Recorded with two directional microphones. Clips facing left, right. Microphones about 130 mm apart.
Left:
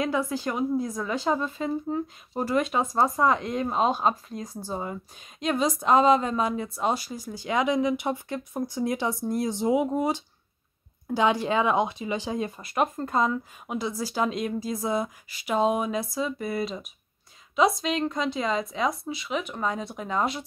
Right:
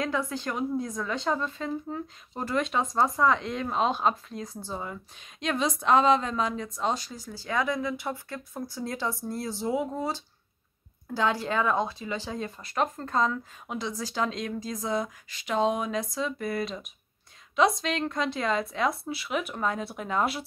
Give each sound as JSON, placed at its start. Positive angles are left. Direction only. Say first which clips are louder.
{"t": 0.0, "sound": "speech", "louder": "left 3 dB", "side_deg": 10}
{"t": 3.3, "sound": "speech", "louder": "left 2 dB", "side_deg": 45}
{"t": 4.6, "sound": "speech", "louder": "left 6 dB", "side_deg": 15}